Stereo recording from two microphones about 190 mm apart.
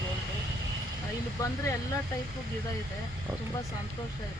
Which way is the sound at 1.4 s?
15° left (ahead or behind).